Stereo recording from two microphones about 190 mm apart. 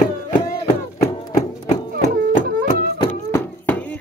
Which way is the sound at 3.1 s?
10° left (ahead or behind).